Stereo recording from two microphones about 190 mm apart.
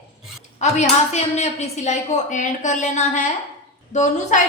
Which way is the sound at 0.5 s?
35° left (ahead or behind).